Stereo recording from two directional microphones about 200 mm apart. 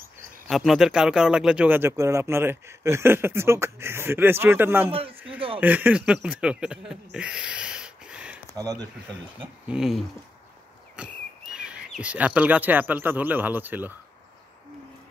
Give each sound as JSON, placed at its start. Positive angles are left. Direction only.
{"t": 0.5, "sound": "speech", "side_deg": 0}
{"t": 4.9, "sound": "a man's voice", "side_deg": -30}
{"t": 5.6, "sound": "speech", "side_deg": -10}
{"t": 7.2, "sound": "a sound", "side_deg": -5}
{"t": 8.5, "sound": "speech", "side_deg": -15}
{"t": 9.7, "sound": "speech", "side_deg": 0}